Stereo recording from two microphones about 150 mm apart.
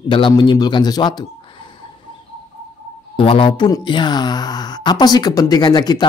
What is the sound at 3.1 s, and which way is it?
Speech, 35° left (ahead or behind).